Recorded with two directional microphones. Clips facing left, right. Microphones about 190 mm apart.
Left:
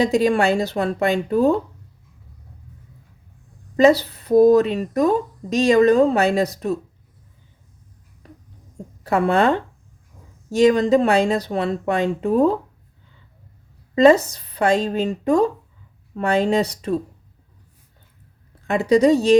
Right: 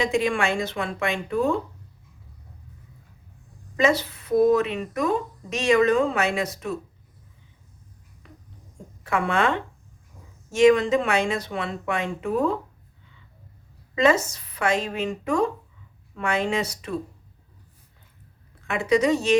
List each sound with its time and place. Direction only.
0.0 s speech: 35° left (ahead or behind)
4.0 s speech: 35° left (ahead or behind)
8.2 s a sound: 35° left (ahead or behind)
9.0 s speech: 35° left (ahead or behind)
13.9 s speech: 35° left (ahead or behind)
18.6 s speech: 35° left (ahead or behind)